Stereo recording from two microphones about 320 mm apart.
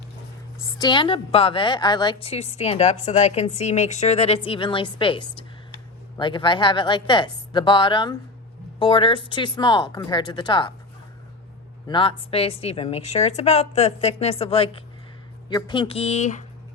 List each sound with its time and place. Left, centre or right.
0.8 s a woman's voice: centre
11.9 s a woman's voice: centre